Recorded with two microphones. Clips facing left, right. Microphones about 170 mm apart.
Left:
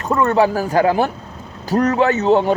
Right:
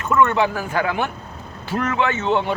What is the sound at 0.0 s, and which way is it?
Speech, 35° left (ahead or behind).